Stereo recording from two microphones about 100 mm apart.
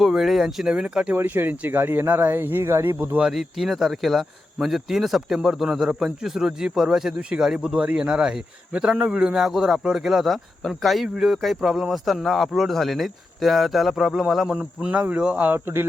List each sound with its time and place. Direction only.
0.0 s speech: centre (ahead or behind)
1.1 s speech: 20° right (ahead or behind)
3.2 s speech: 5° right (ahead or behind); by 15.9 s 25° right (ahead or behind)